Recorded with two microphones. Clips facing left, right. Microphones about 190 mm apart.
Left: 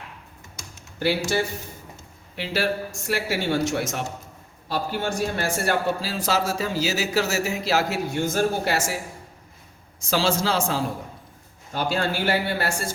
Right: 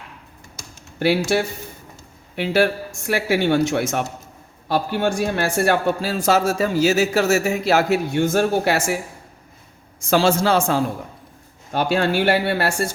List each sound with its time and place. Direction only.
0.9 s a man's voice: 60° right (ahead or behind)
10.1 s a man's voice: 55° right (ahead or behind)